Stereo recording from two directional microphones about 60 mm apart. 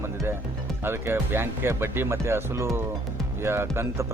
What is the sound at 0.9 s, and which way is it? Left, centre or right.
Speech, right.